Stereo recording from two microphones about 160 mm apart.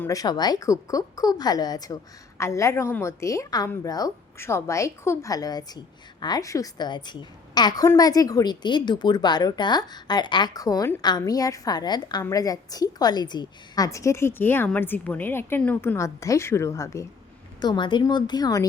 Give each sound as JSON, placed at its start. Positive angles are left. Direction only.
{"t": 0.0, "sound": "a woman's voice", "side_deg": 20}
{"t": 17.6, "sound": "a woman's voice", "side_deg": 30}